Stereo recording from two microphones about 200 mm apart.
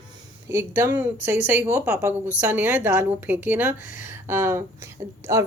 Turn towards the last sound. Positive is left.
turn(degrees=-15)  # may be behind; listen again after turning